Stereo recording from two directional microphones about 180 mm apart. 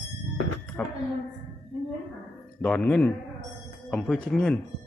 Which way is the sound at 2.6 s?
5° left (ahead or behind).